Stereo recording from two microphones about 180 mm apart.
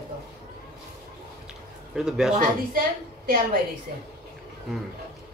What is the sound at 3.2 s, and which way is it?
Speech, 55° right (ahead or behind).